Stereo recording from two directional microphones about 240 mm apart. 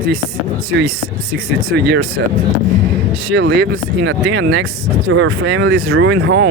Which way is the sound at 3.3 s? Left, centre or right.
Right.